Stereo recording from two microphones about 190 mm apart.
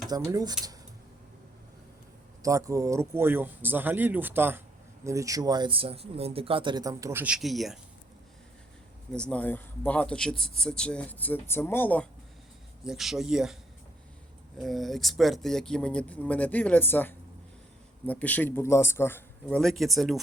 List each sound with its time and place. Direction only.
0.1 s speech: 20° right (ahead or behind)
2.4 s speech: 15° right (ahead or behind); by 7.8 s centre (ahead or behind)
9.1 s speech: 5° left (ahead or behind)
12.8 s speech: centre (ahead or behind)
14.6 s speech: centre (ahead or behind)